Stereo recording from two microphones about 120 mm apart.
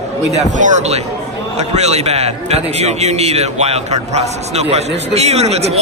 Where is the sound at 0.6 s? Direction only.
85° right.